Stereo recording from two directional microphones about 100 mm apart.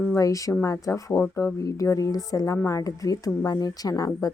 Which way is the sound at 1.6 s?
35° left (ahead or behind).